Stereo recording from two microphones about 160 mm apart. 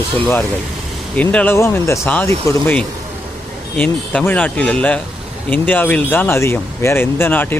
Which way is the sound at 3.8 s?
10° left (ahead or behind).